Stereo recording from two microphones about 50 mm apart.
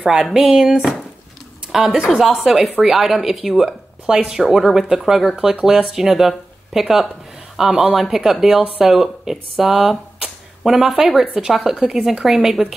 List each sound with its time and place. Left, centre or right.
0.3 s speech: centre
11.8 s a woman's voice: centre
12.3 s speech: centre